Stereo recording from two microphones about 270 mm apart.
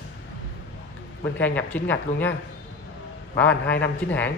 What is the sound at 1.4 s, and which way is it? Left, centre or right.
Speech, centre.